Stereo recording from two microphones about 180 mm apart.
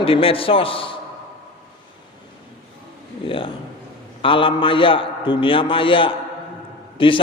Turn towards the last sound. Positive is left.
turn(degrees=30)  # may be behind; listen again after turning